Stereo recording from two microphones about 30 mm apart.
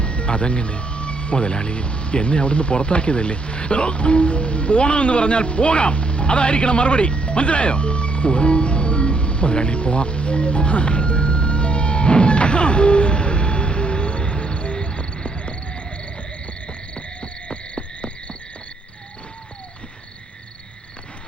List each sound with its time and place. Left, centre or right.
0.0 s music: left
16.6 s owl: left